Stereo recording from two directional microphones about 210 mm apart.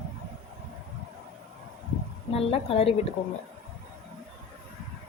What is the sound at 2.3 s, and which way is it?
Speech, 30° left (ahead or behind).